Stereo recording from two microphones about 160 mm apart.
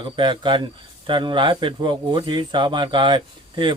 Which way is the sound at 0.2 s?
30° right (ahead or behind).